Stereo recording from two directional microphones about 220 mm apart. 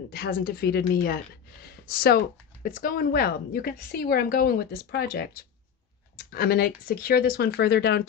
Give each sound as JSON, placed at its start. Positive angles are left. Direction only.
{"t": 0.1, "sound": "speech", "side_deg": 45}